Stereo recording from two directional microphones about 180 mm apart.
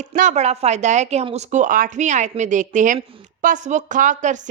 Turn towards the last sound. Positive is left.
turn(degrees=-45)  # may be behind; listen again after turning